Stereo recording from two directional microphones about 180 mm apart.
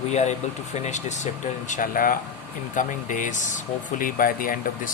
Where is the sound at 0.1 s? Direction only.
40° left (ahead or behind).